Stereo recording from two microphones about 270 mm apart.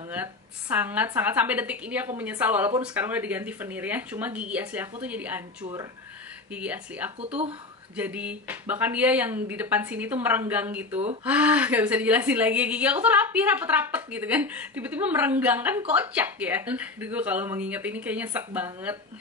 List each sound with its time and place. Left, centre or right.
0.1 s a woman's voice: centre
7.2 s speech: right
7.9 s a woman's voice: centre